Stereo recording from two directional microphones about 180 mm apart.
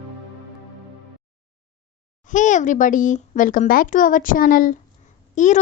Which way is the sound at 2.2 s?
45° left (ahead or behind).